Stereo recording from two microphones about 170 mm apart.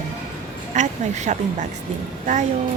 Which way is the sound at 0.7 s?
45° right (ahead or behind).